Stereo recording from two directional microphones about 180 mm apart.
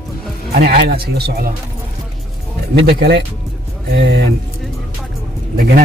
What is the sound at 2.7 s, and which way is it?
Speech, 70° right (ahead or behind).